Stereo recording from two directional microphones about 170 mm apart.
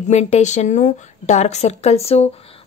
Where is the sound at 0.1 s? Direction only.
40° left (ahead or behind).